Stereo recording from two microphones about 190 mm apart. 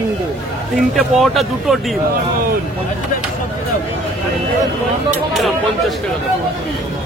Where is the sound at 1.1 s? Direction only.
Centre (ahead or behind).